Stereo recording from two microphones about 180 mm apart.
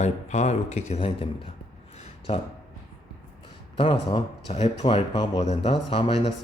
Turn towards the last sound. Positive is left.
turn(degrees=35)  # may be behind; listen again after turning